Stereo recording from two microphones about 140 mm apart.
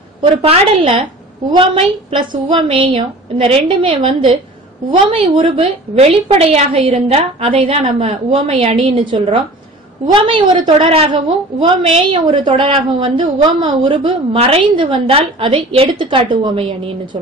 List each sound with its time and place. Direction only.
0.2 s a woman's voice: 40° right (ahead or behind)
2.0 s a woman's voice: 35° right (ahead or behind)